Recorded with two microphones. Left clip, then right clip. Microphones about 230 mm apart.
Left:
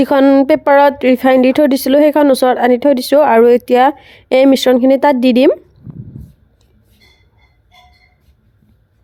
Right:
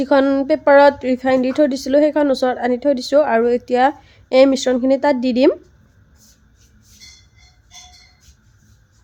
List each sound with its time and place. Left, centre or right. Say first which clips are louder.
0.0 s speech: left 6 dB; left